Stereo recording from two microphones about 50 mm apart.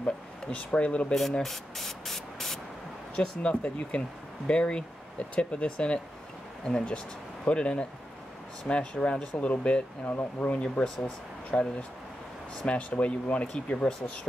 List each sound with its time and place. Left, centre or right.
0.0 s speech: left
1.4 s speech: centre
3.2 s speech: left
10.1 s speech: left
10.6 s speech: left
12.6 s speech: left